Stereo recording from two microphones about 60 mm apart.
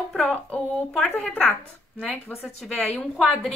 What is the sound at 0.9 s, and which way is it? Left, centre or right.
Speech, centre.